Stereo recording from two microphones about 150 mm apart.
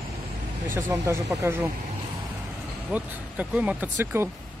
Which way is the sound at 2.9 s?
10° right (ahead or behind).